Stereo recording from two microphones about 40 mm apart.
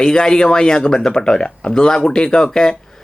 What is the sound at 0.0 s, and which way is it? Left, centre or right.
Speech, centre.